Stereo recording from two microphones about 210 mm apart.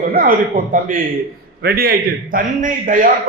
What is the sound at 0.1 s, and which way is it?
A man's voice, 45° right (ahead or behind).